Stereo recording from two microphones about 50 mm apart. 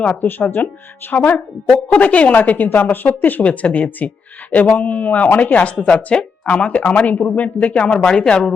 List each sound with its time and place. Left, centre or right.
0.1 s a woman's voice: left
3.4 s a woman's voice: left; by 8.5 s centre